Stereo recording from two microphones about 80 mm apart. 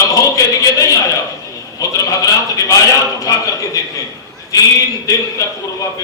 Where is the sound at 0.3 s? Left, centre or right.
Left.